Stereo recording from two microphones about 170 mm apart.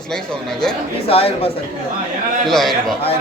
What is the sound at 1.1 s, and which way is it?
Speech, 35° left (ahead or behind).